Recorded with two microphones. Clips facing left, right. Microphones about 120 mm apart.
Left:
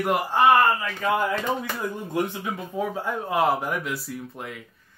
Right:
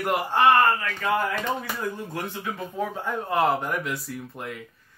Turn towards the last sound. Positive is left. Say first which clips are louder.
# even
turn(degrees=0)  # may be behind; listen again after turning